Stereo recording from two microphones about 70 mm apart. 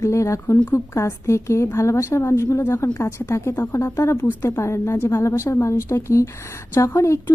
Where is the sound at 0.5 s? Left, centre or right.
Left.